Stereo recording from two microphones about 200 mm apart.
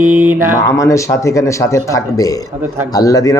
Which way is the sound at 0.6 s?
15° left (ahead or behind).